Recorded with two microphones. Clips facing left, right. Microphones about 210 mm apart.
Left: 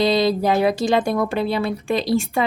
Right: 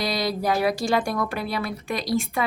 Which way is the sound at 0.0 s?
25° left (ahead or behind).